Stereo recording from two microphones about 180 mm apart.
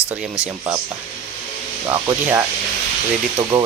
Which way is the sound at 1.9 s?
15° right (ahead or behind).